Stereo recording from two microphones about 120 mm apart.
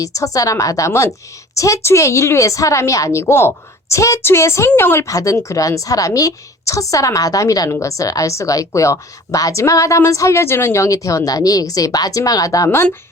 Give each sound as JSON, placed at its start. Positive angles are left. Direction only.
{"t": 0.0, "sound": "a woman's voice", "side_deg": 30}